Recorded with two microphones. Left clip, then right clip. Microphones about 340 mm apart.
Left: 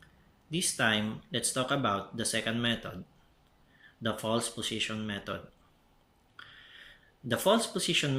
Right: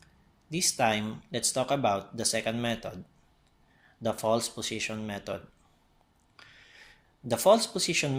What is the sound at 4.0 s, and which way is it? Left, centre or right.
Speech, centre.